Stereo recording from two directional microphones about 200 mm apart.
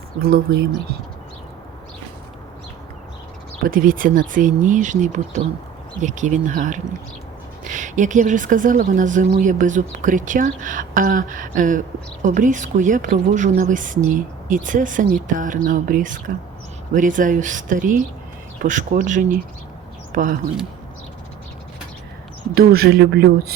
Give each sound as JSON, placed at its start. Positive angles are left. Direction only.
{"t": 0.2, "sound": "speech", "side_deg": -50}
{"t": 3.6, "sound": "a woman's voice", "side_deg": -45}
{"t": 22.5, "sound": "speech", "side_deg": -50}